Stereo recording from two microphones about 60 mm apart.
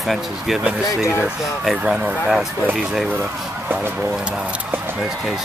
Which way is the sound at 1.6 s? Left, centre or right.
Centre.